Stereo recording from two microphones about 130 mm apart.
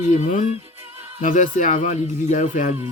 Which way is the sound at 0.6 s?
50° right (ahead or behind).